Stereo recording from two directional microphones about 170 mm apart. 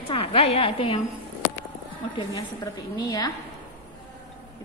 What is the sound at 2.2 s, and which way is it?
A woman's voice, 20° left (ahead or behind).